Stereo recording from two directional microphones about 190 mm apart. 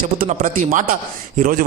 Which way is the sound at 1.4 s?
45° right (ahead or behind).